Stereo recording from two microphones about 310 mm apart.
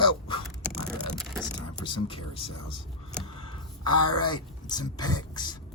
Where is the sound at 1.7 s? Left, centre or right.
Centre.